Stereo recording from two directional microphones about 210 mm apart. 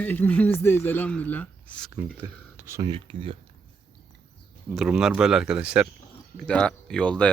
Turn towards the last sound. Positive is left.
turn(degrees=5)  # may be behind; listen again after turning